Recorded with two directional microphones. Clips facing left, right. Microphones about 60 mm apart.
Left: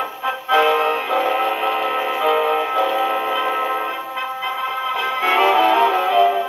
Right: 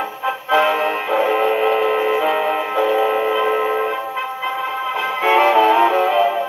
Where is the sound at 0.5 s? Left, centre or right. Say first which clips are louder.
Left 1 dB; right.